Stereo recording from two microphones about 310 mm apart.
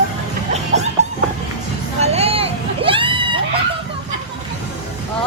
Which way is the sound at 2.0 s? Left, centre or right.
Centre.